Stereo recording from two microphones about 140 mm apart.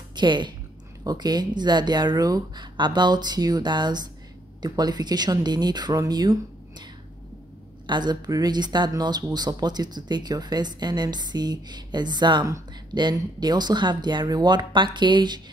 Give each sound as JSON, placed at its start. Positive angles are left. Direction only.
{"t": 0.1, "sound": "speech", "side_deg": -35}
{"t": 7.8, "sound": "speech", "side_deg": -30}